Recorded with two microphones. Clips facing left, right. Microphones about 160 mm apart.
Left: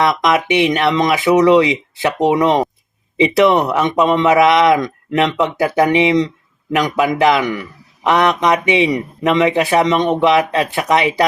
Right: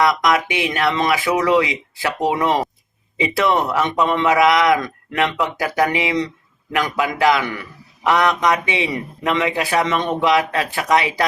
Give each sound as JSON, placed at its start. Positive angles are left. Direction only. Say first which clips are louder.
{"t": 0.0, "sound": "a man's voice", "louder": "left 2 dB", "side_deg": 25}